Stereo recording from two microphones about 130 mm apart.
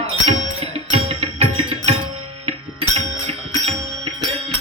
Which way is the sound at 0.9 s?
45° right (ahead or behind).